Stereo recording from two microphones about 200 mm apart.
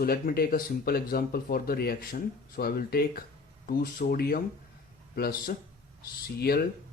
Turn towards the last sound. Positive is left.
turn(degrees=50)  # may be behind; listen again after turning